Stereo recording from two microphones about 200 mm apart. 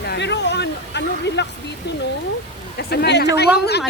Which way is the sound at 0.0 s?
55° left (ahead or behind).